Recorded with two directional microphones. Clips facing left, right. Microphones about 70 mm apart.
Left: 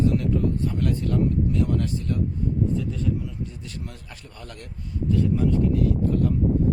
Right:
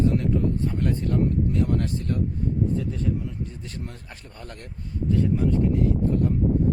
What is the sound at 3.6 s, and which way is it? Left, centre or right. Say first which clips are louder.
Speech: right 1 dB; right.